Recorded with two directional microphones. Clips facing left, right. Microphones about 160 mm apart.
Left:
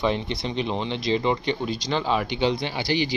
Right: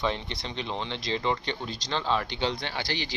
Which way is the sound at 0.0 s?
15° left (ahead or behind).